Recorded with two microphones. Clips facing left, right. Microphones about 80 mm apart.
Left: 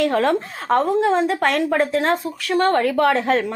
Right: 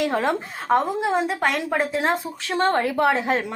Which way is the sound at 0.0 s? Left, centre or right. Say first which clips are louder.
Left 4 dB; centre.